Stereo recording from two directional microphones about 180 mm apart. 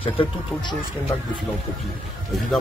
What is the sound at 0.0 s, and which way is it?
Speech, 30° left (ahead or behind).